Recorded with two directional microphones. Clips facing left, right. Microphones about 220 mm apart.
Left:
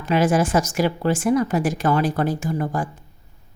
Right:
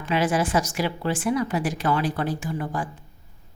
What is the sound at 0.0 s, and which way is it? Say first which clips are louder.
Speech: left 4 dB; 45° left (ahead or behind).